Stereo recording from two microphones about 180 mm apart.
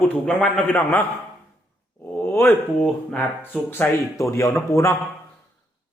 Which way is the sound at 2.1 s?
15° left (ahead or behind).